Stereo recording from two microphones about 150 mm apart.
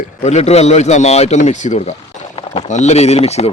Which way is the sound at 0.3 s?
45° left (ahead or behind).